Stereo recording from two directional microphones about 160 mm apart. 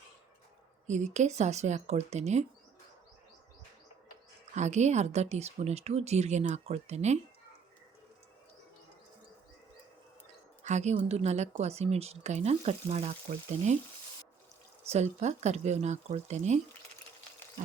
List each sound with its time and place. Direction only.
0.9 s a woman's voice: 45° right (ahead or behind)
4.5 s a woman's voice: 45° right (ahead or behind)
10.6 s a woman's voice: 45° right (ahead or behind)
14.8 s a woman's voice: 45° right (ahead or behind)